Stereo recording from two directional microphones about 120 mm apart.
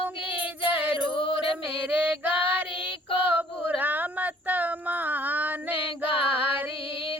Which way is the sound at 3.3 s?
15° right (ahead or behind).